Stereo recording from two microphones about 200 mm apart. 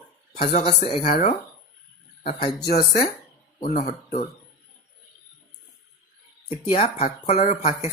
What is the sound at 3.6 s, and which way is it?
Speech, 40° left (ahead or behind).